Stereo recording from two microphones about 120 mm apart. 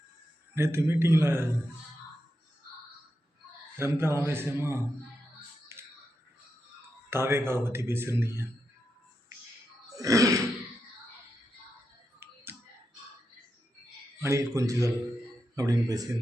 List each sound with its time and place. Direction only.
0.5 s speech: 20° right (ahead or behind)
3.8 s speech: 20° right (ahead or behind)
5.7 s music: 20° right (ahead or behind)
7.1 s speech: 20° right (ahead or behind)
10.0 s speech: 30° right (ahead or behind)
12.2 s finger snapping: 20° right (ahead or behind)
14.2 s speech: 25° right (ahead or behind)